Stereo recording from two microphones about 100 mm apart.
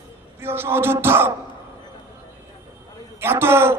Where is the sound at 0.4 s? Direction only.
25° right (ahead or behind).